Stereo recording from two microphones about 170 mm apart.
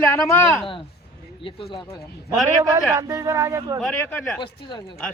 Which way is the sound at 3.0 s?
20° right (ahead or behind).